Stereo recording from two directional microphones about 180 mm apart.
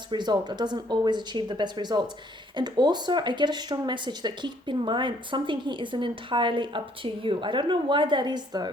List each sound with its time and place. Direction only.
0.1 s speech: 25° right (ahead or behind)